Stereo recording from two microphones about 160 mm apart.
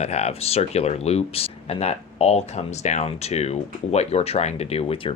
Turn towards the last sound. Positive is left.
turn(degrees=35)  # may be behind; listen again after turning